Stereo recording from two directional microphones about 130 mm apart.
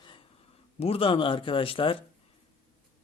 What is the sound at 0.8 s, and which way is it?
Speech, 45° left (ahead or behind).